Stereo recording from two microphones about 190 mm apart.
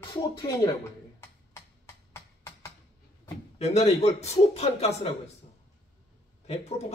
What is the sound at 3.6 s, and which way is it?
A man's voice, 35° left (ahead or behind).